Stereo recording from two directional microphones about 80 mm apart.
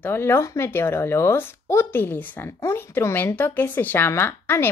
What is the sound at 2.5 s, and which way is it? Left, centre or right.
A woman's voice, left.